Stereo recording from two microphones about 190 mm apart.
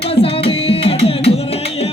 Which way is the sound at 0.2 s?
30° left (ahead or behind).